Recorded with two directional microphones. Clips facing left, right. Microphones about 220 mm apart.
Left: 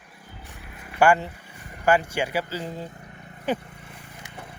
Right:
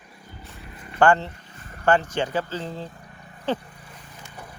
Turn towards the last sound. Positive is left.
turn(degrees=25)  # may be behind; listen again after turning